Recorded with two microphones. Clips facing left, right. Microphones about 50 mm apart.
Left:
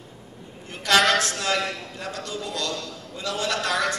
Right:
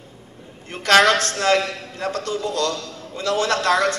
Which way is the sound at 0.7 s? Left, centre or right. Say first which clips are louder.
Right 5 dB; right.